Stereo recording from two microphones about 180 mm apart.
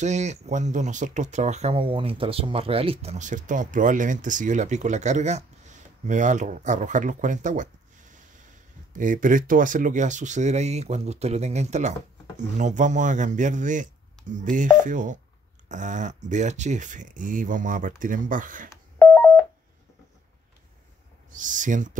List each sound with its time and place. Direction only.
0.0 s speech: 40° right (ahead or behind)
18.9 s telephone dialing: 10° left (ahead or behind)
21.3 s speech: 45° right (ahead or behind)